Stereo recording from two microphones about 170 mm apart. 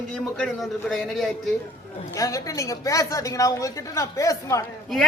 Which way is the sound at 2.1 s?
20° left (ahead or behind).